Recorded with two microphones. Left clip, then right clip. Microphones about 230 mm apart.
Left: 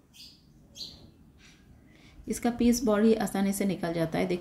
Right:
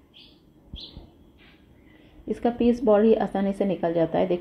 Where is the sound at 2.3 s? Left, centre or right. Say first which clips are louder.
Right 5 dB; centre.